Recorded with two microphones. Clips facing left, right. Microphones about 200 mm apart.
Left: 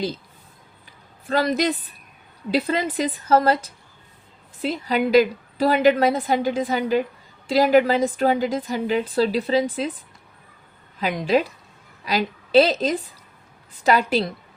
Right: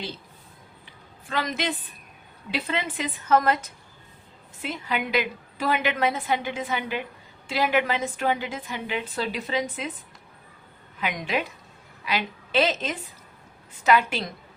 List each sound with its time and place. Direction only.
1.3 s a woman's voice: 40° left (ahead or behind)
11.0 s a woman's voice: 35° left (ahead or behind)